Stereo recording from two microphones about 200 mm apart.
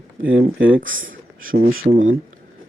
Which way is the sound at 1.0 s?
45° right (ahead or behind).